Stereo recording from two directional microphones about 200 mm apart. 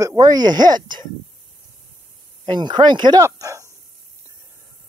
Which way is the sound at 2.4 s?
20° right (ahead or behind).